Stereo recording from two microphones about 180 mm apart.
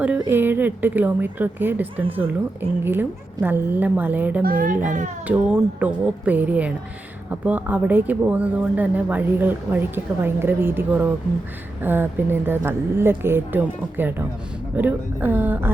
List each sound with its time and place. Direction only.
0.0 s speech: 10° right (ahead or behind)
4.4 s a child's voice: 50° right (ahead or behind)
5.3 s speech: 10° right (ahead or behind)